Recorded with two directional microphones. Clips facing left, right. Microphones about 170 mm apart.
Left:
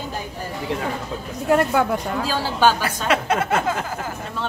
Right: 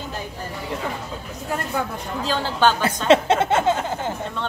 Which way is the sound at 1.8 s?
80° left.